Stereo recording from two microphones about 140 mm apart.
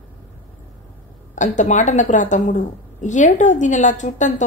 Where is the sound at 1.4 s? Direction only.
60° left (ahead or behind).